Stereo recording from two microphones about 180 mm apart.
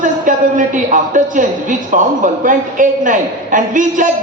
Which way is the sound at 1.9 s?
45° right (ahead or behind).